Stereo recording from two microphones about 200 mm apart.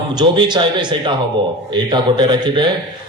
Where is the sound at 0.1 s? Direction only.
20° right (ahead or behind).